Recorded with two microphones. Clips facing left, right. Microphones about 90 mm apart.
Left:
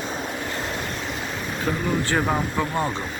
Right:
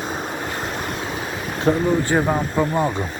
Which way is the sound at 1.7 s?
30° right (ahead or behind).